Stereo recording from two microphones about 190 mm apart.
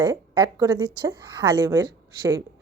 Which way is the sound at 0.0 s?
20° right (ahead or behind).